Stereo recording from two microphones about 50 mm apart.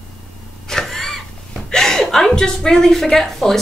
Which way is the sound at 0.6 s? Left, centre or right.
Centre.